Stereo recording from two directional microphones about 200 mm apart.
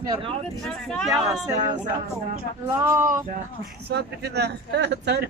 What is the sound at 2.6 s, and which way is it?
Speech, 10° right (ahead or behind).